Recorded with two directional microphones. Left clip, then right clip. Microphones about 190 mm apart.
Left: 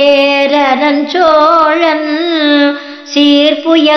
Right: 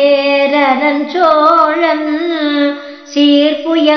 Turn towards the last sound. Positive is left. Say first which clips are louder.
# left 3 dB
turn(degrees=25)  # may be behind; listen again after turning